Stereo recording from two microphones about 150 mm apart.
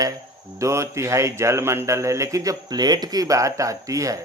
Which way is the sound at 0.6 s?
20° right (ahead or behind).